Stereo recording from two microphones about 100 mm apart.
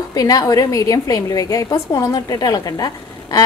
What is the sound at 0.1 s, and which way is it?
A woman's voice, 40° left (ahead or behind).